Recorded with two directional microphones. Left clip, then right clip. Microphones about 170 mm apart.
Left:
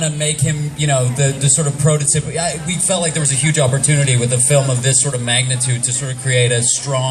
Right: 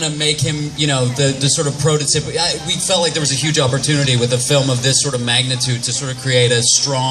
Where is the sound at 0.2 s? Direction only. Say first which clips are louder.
Right 3 dB; 30° right (ahead or behind).